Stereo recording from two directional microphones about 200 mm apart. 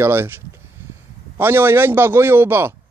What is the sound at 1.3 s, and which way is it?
Speech, 10° right (ahead or behind).